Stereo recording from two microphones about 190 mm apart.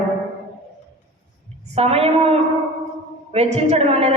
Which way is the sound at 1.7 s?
35° right (ahead or behind).